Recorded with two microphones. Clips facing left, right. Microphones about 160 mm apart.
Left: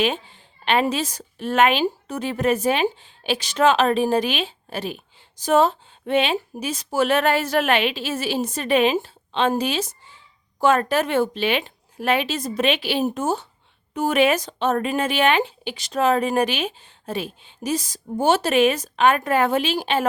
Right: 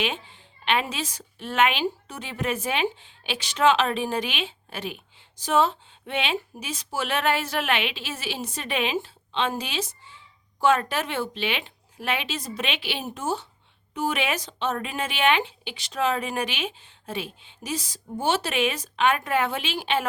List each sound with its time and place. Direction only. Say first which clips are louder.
0.6 s a woman's voice: left 6 dB; 40° left (ahead or behind)